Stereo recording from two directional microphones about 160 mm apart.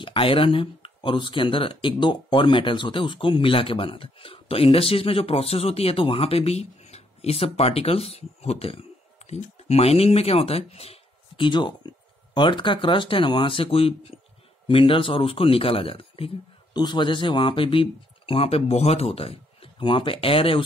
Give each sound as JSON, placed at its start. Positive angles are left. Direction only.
{"t": 0.0, "sound": "speech", "side_deg": 35}